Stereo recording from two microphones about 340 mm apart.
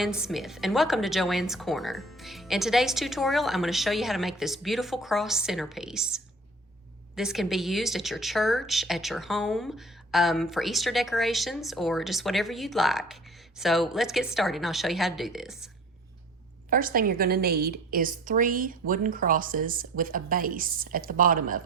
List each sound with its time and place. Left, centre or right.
0.0 s a woman's voice: centre
16.6 s a woman's voice: right